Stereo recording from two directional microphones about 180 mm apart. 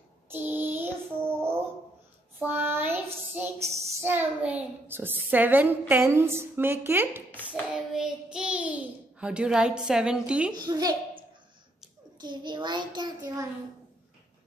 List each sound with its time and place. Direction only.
0.3 s child singing: 10° right (ahead or behind)
3.8 s a woman's voice: 10° right (ahead or behind)
7.2 s hands: 10° left (ahead or behind)
7.9 s a child's voice: 5° right (ahead or behind)
10.5 s a child's voice: 20° right (ahead or behind)